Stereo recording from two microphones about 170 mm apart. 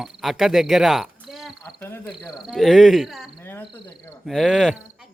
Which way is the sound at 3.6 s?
25° left (ahead or behind).